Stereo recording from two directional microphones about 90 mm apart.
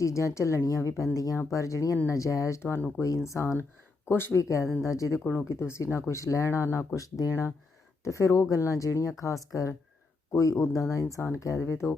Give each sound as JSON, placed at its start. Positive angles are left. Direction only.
{"t": 0.0, "sound": "speech", "side_deg": 35}